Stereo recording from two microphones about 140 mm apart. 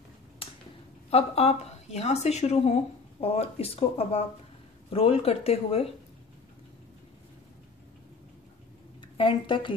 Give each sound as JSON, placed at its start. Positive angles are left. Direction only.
{"t": 0.4, "sound": "a sound", "side_deg": 40}
{"t": 1.1, "sound": "speech", "side_deg": 45}
{"t": 9.1, "sound": "speech", "side_deg": 35}